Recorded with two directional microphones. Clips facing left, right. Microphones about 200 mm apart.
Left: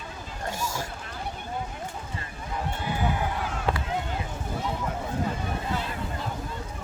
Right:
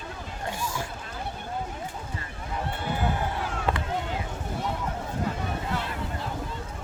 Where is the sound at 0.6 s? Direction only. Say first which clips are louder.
Left 1 dB; 40° left (ahead or behind).